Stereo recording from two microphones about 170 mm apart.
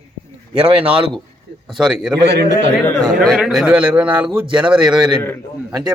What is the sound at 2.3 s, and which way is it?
Speech, 80° right.